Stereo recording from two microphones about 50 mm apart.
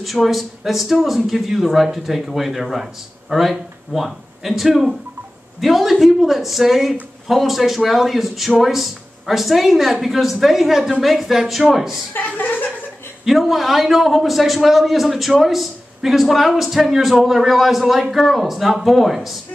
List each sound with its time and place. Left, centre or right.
0.0 s speech: centre
12.2 s speech: left
13.2 s speech: centre